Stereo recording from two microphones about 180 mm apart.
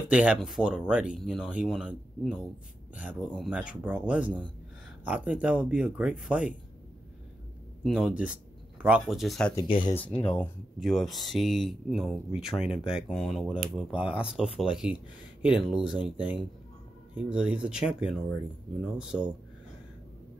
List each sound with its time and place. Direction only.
0.1 s speech: 5° right (ahead or behind)
7.8 s speech: 5° right (ahead or behind)
9.7 s speech: 50° left (ahead or behind)
9.9 s speech: 10° left (ahead or behind)
17.1 s speech: 5° right (ahead or behind)